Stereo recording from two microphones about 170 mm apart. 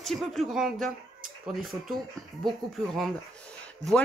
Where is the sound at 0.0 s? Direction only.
Centre (ahead or behind).